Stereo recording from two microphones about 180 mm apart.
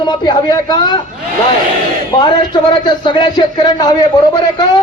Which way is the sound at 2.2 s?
25° left (ahead or behind).